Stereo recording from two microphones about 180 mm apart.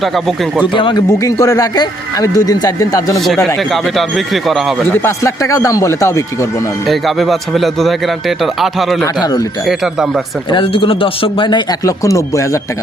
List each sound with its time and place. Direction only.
0.0 s speech: centre (ahead or behind)
0.6 s a man's voice: 25° left (ahead or behind)
3.4 s speech: centre (ahead or behind)
5.0 s speech: 15° left (ahead or behind)
6.8 s speech: centre (ahead or behind)
9.2 s a man's voice: 20° left (ahead or behind)
9.6 s speech: 5° right (ahead or behind)
10.5 s a man's voice: 30° left (ahead or behind)